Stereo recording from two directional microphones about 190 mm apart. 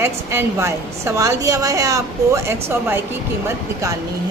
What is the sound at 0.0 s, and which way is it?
A woman's voice, 15° right (ahead or behind).